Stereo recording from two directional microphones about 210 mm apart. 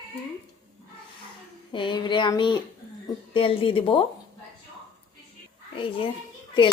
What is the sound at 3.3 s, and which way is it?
Speech, 25° left (ahead or behind).